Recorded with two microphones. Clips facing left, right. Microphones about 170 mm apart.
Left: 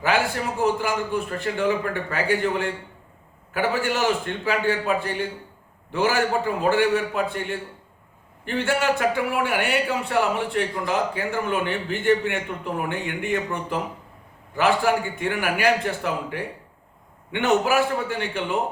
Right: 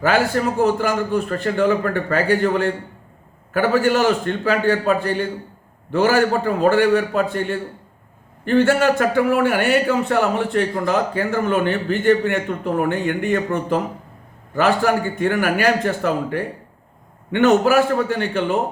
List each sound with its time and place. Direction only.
0.0 s a man's voice: 40° right (ahead or behind)